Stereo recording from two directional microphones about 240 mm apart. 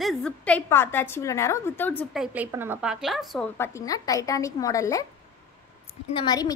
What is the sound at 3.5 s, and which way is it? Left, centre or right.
A woman's voice, centre.